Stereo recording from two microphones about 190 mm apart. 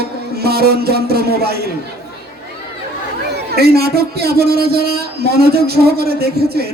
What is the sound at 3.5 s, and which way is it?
Speech, 55° right (ahead or behind).